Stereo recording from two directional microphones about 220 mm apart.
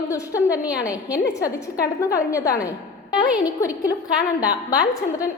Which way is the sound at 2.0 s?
15° left (ahead or behind).